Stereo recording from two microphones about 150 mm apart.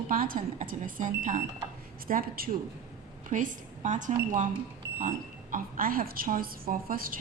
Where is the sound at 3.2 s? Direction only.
60° right (ahead or behind).